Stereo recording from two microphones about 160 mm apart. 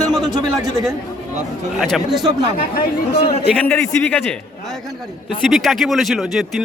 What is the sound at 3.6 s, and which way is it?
Speech, 10° left (ahead or behind).